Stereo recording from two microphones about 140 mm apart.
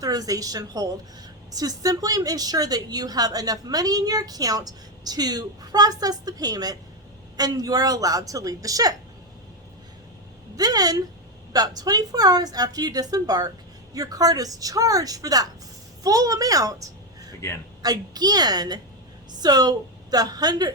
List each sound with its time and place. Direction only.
0.0 s a woman's voice: 25° right (ahead or behind)
10.6 s a woman's voice: 25° right (ahead or behind)